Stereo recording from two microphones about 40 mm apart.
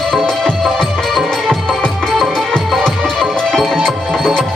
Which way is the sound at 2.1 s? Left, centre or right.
Centre.